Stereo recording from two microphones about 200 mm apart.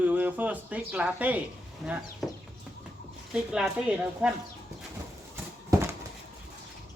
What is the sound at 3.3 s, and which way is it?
Speech, 5° right (ahead or behind).